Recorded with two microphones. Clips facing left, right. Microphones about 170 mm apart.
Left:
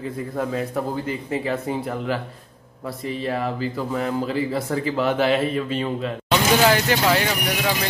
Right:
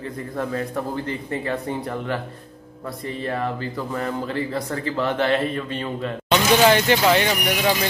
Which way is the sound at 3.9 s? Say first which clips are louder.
Left 2 dB; 5° left (ahead or behind).